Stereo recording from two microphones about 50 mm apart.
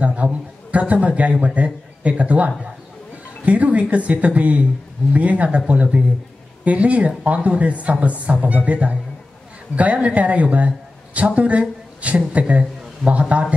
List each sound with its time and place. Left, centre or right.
0.0 s a man's voice: right